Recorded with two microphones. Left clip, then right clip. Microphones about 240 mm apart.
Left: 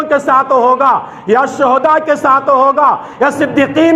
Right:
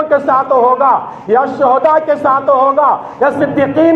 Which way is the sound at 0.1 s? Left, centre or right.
Left.